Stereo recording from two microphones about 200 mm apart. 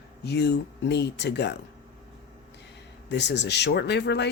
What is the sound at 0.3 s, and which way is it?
Speech, 55° left (ahead or behind).